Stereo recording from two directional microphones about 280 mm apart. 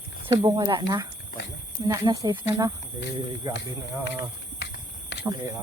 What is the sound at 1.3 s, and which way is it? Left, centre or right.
Speech, left.